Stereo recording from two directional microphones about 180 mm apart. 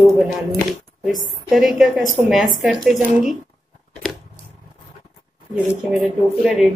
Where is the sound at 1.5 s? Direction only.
Centre (ahead or behind).